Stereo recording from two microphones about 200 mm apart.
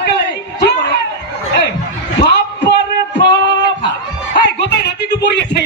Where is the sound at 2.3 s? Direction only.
60° left (ahead or behind).